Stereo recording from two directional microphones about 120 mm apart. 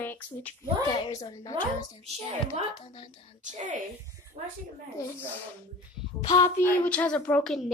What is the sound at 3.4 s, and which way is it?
Speech, 90° right.